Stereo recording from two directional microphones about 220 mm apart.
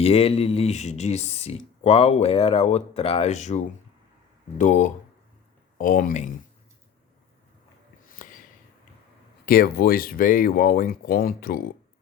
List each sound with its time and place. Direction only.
0.0 s speech: 25° left (ahead or behind)
8.2 s a sound: 35° left (ahead or behind)
9.5 s speech: 45° left (ahead or behind)